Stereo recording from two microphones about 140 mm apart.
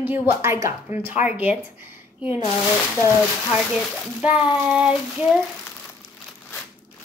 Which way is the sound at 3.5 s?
10° right (ahead or behind).